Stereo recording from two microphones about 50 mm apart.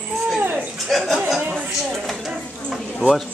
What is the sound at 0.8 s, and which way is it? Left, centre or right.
Speech, centre.